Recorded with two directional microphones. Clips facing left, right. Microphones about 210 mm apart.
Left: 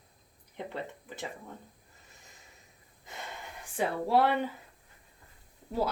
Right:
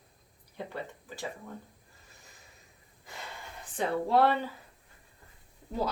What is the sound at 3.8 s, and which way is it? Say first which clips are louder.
Speech: right 1 dB; 10° left (ahead or behind).